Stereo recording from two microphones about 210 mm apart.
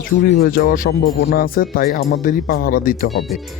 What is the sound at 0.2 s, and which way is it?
Speech, 45° left (ahead or behind).